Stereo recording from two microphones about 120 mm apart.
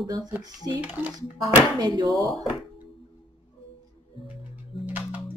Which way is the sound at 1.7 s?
35° right (ahead or behind).